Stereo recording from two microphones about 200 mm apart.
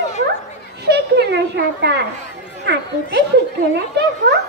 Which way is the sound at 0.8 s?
55° right (ahead or behind).